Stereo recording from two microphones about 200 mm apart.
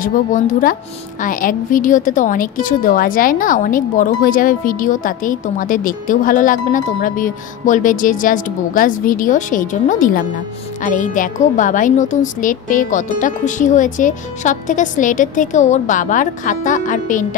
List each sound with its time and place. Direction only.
0.0 s a woman's voice: 40° left (ahead or behind)